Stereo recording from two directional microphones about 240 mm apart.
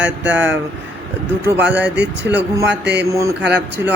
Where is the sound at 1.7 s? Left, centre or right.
Centre.